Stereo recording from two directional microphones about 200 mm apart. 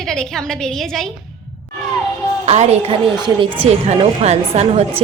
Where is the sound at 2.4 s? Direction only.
30° right (ahead or behind).